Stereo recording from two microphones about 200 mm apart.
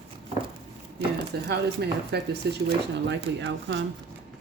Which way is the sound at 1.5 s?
55° right (ahead or behind).